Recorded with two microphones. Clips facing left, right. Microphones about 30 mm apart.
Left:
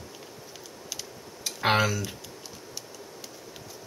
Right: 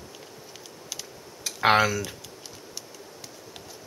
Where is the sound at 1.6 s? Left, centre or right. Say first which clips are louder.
Right 4 dB; centre.